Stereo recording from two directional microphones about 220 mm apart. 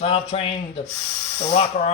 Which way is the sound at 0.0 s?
25° left (ahead or behind).